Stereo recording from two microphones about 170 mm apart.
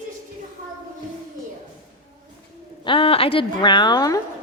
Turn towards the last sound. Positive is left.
turn(degrees=20)  # may be behind; listen again after turning